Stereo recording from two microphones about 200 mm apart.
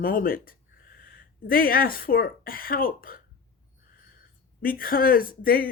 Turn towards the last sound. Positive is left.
turn(degrees=45)  # may be behind; listen again after turning